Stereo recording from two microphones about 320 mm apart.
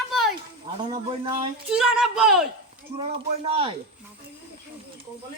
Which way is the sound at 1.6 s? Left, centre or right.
Centre.